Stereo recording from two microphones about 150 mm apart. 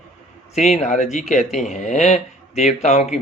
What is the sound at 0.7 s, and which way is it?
Speech, 55° left (ahead or behind).